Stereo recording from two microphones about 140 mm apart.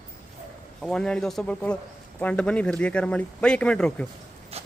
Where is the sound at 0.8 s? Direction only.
5° left (ahead or behind).